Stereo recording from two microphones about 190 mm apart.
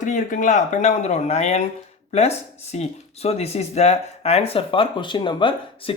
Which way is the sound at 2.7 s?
35° left (ahead or behind).